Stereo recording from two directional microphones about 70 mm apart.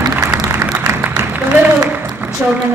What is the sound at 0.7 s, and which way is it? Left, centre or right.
Music, right.